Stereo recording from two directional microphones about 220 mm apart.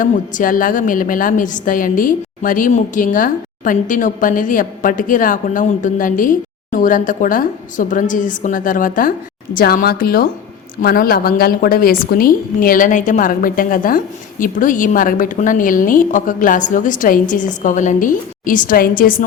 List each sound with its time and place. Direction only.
0.0 s a woman's voice: 40° left (ahead or behind)